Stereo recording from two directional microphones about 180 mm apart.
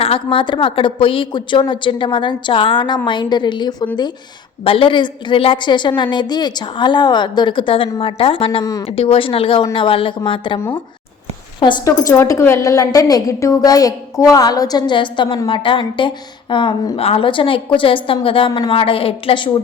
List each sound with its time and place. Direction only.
0.0 s a woman's voice: 30° left (ahead or behind)
8.6 s a woman's voice: 20° left (ahead or behind)
9.0 s a woman's voice: 30° left (ahead or behind)
11.6 s a woman's voice: 20° left (ahead or behind)